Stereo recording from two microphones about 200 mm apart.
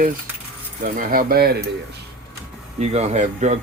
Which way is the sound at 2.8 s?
35° right (ahead or behind).